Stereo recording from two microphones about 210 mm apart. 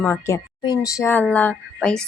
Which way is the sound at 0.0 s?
15° left (ahead or behind).